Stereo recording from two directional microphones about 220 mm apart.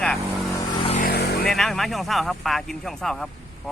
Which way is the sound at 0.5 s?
25° left (ahead or behind).